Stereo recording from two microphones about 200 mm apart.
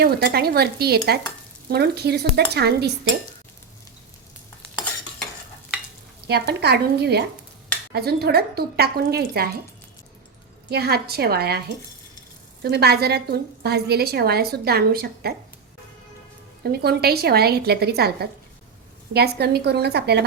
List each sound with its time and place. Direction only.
0.0 s a woman's voice: 55° right (ahead or behind)
6.2 s a woman's voice: 55° right (ahead or behind)
10.7 s a woman's voice: 55° right (ahead or behind)
12.6 s a woman's voice: 55° right (ahead or behind)
16.7 s a woman's voice: 50° right (ahead or behind)